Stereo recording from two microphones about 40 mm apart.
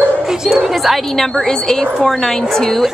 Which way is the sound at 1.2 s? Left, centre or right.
Centre.